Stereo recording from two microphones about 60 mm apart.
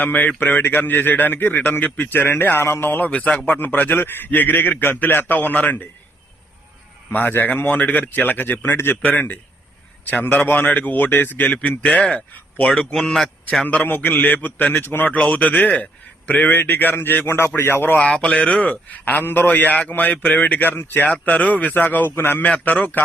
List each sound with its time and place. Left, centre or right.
0.0 s a man's voice: left
3.1 s a man's voice: left
7.1 s a man's voice: left
12.7 s a man's voice: centre
13.7 s a man's voice: left
17.9 s a man's voice: left
22.4 s a man's voice: left